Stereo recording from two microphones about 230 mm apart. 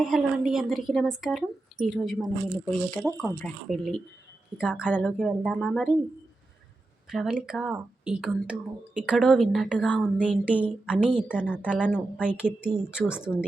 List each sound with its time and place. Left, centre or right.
0.0 s a woman's voice: centre
7.1 s a woman's voice: centre
10.4 s a woman's voice: centre
11.3 s a woman's voice: centre
11.9 s a woman's voice: centre